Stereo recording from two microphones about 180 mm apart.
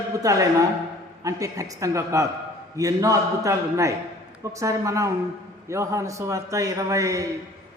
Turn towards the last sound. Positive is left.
turn(degrees=-20)  # may be behind; listen again after turning